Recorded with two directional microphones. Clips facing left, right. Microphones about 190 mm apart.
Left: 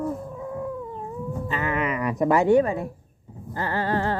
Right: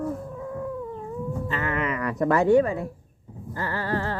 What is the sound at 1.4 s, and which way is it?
Speech, 15° left (ahead or behind).